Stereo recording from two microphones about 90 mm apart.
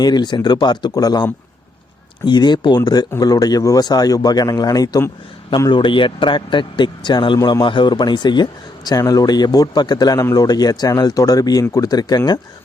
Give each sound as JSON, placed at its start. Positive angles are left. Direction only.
{"t": 0.0, "sound": "speech", "side_deg": 50}
{"t": 2.2, "sound": "speech", "side_deg": 55}
{"t": 5.7, "sound": "speech", "side_deg": 65}
{"t": 7.3, "sound": "a man's voice", "side_deg": 40}
{"t": 7.6, "sound": "speech", "side_deg": 60}